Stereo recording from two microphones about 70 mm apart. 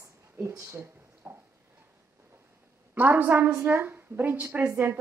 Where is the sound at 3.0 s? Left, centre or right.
Right.